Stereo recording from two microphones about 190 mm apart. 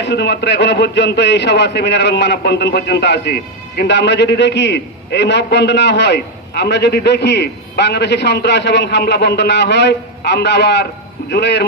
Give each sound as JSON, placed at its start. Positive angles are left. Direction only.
{"t": 0.0, "sound": "a man's voice", "side_deg": 60}